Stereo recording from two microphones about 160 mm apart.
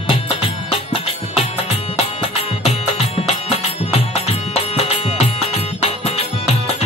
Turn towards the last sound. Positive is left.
turn(degrees=40)  # may be behind; listen again after turning